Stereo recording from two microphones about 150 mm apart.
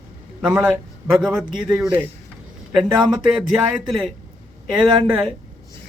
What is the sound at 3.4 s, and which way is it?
Speech, centre (ahead or behind).